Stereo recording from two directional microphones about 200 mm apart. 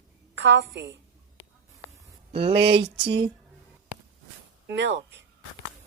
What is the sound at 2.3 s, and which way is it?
Speech, 25° right (ahead or behind).